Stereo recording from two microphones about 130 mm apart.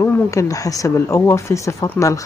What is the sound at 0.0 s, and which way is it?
Speech, 25° left (ahead or behind).